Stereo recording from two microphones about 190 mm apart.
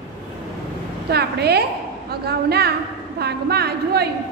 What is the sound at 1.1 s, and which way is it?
A woman's voice, 60° right (ahead or behind).